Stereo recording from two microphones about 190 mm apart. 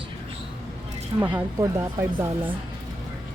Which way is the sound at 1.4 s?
15° right (ahead or behind).